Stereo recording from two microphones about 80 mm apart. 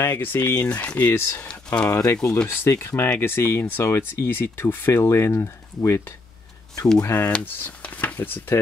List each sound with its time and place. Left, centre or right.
0.0 s speech: left
0.7 s speech: centre
1.1 s speech: left
1.4 s speech: centre
1.9 s speech: left
2.1 s speech: centre
2.4 s speech: left
7.2 s speech: left